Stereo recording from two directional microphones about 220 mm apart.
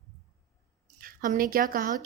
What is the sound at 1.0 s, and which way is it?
Speech, 40° right (ahead or behind).